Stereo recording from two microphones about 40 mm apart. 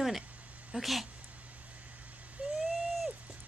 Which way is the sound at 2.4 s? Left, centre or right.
Right.